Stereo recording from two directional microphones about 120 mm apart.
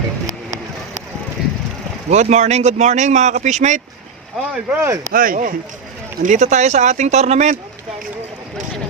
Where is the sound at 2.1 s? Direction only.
70° right (ahead or behind).